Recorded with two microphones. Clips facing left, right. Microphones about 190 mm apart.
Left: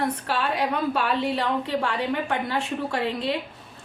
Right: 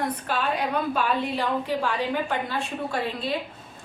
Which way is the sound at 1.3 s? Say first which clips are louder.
Left 1 dB; 70° left (ahead or behind).